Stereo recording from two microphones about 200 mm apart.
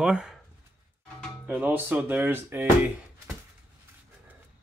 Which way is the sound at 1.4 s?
10° right (ahead or behind).